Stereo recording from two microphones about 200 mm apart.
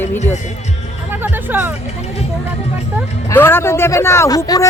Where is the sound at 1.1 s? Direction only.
10° right (ahead or behind).